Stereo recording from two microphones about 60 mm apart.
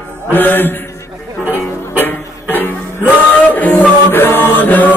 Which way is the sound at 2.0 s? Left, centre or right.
Left.